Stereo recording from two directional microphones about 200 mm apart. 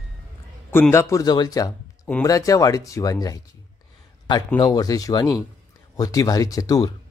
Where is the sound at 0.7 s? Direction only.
10° left (ahead or behind).